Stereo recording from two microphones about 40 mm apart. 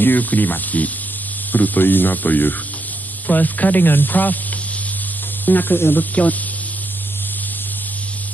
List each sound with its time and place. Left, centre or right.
0.0 s speech: left
5.4 s speech: left